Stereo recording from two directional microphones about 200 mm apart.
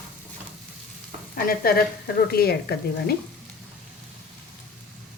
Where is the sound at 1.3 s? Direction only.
45° left (ahead or behind).